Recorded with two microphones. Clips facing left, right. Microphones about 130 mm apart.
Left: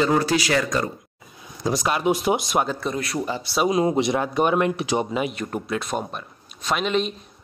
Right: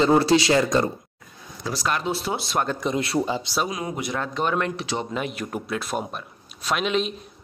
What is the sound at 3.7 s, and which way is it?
Speech, 25° left (ahead or behind).